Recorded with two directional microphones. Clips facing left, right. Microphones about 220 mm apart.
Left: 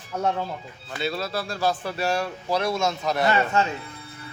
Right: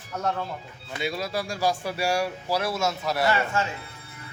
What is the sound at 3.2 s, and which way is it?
Speech, 20° left (ahead or behind).